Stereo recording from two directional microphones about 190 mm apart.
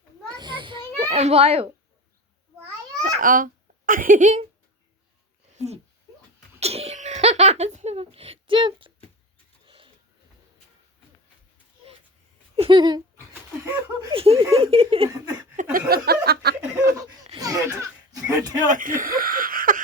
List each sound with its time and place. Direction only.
0.3 s children playing: 25° right (ahead or behind)
0.9 s a child's voice: 35° right (ahead or behind)
3.0 s a child's voice: 45° right (ahead or behind)
5.5 s a sound: 35° right (ahead or behind)
12.5 s a sound: 25° right (ahead or behind)
14.1 s speech: 30° right (ahead or behind)
15.9 s speech: 55° right (ahead or behind)
17.3 s speech: 20° right (ahead or behind)
18.7 s speech: 45° right (ahead or behind)